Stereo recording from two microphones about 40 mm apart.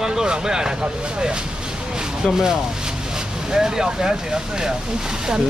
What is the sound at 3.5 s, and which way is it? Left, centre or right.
Speech, centre.